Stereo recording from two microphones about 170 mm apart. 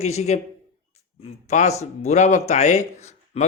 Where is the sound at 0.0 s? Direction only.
40° left (ahead or behind).